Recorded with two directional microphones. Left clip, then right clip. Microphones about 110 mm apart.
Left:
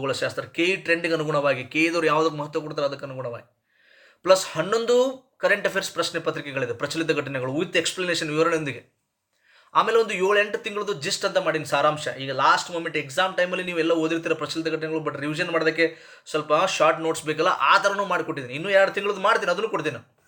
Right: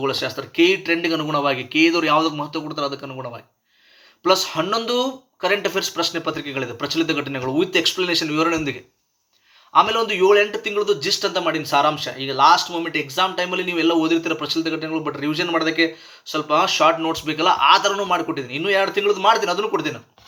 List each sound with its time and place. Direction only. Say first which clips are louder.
0.0 s speech: right 3 dB; 30° left (ahead or behind)
4.2 s speech: right 1 dB; 35° left (ahead or behind)
9.7 s a man's voice: right 3 dB; 35° left (ahead or behind)